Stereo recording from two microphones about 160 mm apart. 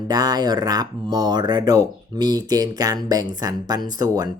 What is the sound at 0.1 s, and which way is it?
Speech, 25° right (ahead or behind).